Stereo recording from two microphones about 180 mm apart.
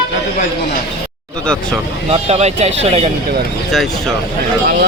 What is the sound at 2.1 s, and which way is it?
Speech, 35° right (ahead or behind).